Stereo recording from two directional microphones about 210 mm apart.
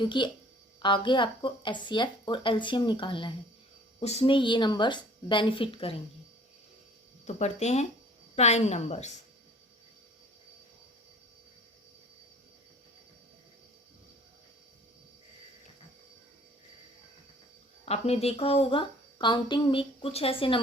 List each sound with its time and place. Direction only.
0.0 s speech: 20° left (ahead or behind)
7.3 s a woman's voice: 30° left (ahead or behind)
17.8 s speech: 30° left (ahead or behind)